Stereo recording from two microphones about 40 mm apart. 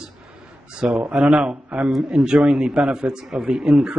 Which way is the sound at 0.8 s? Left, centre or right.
Right.